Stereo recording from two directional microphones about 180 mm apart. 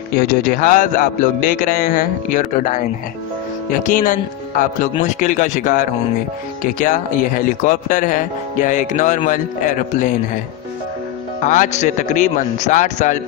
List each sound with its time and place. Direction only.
0.2 s speech: 50° left (ahead or behind)
11.4 s a man's voice: 45° left (ahead or behind)